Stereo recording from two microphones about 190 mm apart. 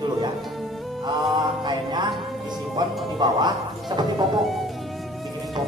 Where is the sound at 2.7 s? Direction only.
20° right (ahead or behind).